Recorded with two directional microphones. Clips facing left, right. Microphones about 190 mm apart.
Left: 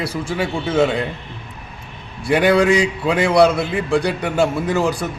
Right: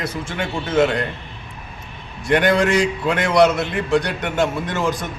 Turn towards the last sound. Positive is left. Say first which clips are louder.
# left 3 dB
turn(degrees=10)  # may be behind; listen again after turning